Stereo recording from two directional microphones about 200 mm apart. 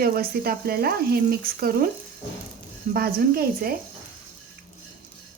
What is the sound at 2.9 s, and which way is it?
Speech, 50° right (ahead or behind).